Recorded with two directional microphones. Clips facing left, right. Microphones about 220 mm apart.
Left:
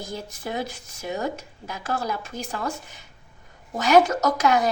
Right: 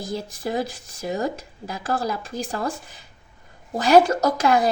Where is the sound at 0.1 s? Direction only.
35° right (ahead or behind).